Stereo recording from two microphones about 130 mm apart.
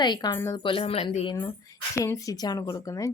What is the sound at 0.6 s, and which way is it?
Speech, 45° left (ahead or behind).